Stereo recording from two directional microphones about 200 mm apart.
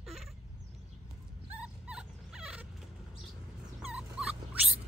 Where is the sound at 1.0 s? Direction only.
5° right (ahead or behind).